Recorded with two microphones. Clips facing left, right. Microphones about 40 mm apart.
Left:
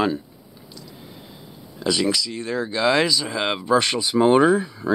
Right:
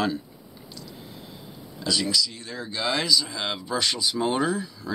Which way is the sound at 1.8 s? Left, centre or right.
Left.